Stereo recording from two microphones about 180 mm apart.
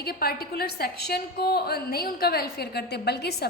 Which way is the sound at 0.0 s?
60° left (ahead or behind).